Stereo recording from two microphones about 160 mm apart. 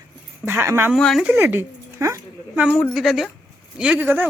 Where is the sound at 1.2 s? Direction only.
10° right (ahead or behind).